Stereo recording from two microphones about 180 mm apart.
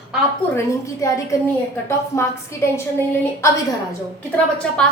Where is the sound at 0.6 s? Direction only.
15° left (ahead or behind).